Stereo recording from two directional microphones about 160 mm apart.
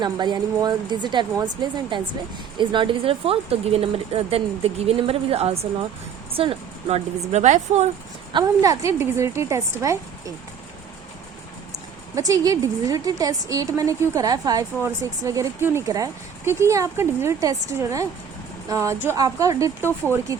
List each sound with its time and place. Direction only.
0.0 s a woman's voice: 25° right (ahead or behind); by 7.9 s 45° right (ahead or behind)
8.3 s a woman's voice: 25° right (ahead or behind)
12.1 s a woman's voice: 20° right (ahead or behind)